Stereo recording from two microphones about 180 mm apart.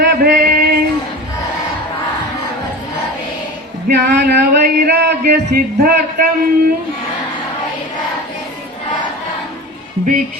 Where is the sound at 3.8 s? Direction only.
65° right (ahead or behind).